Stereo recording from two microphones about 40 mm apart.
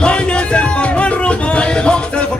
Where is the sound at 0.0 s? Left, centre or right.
Left.